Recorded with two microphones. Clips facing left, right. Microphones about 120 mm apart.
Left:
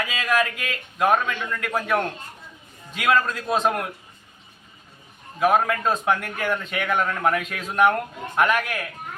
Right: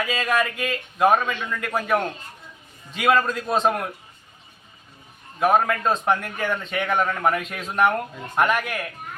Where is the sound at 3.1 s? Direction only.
Centre (ahead or behind).